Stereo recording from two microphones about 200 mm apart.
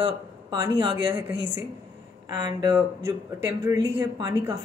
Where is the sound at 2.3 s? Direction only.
20° right (ahead or behind).